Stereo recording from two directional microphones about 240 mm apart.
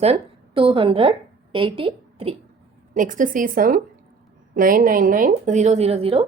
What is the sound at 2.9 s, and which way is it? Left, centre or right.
Speech, right.